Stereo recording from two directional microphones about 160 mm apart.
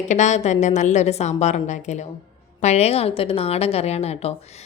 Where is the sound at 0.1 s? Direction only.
45° left (ahead or behind).